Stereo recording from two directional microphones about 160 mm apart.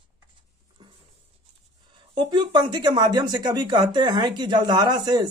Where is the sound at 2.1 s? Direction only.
25° right (ahead or behind).